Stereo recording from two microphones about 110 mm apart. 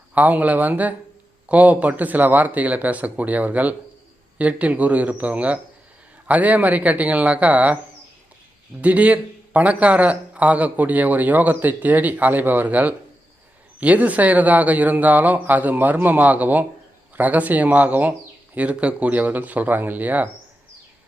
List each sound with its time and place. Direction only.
0.1 s a man's voice: 15° right (ahead or behind)
8.8 s a man's voice: 15° right (ahead or behind)